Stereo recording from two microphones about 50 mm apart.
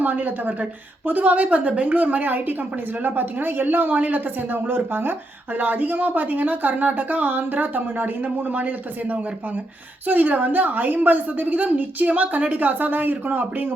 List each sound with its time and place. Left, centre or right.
0.0 s speech: right